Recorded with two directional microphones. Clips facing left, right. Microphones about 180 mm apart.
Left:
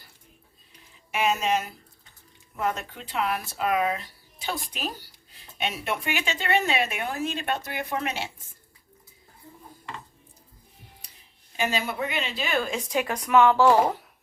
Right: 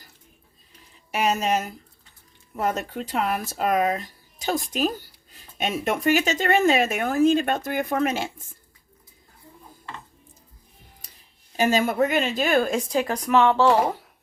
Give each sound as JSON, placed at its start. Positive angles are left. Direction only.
{"t": 1.1, "sound": "speech", "side_deg": -40}
{"t": 11.5, "sound": "speech", "side_deg": -45}
{"t": 12.9, "sound": "speech", "side_deg": -35}